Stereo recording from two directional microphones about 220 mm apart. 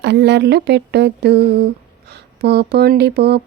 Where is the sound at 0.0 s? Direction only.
50° right (ahead or behind).